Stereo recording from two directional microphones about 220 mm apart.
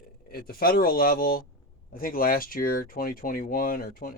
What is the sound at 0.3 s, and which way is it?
Speech, 45° left (ahead or behind).